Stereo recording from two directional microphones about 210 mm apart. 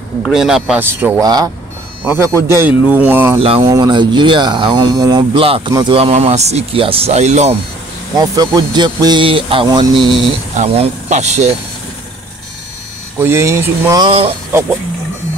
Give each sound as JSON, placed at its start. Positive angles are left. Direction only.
{"t": 0.2, "sound": "speech", "side_deg": 0}
{"t": 3.3, "sound": "speech", "side_deg": -25}
{"t": 8.2, "sound": "speech", "side_deg": -20}
{"t": 13.2, "sound": "speech", "side_deg": -15}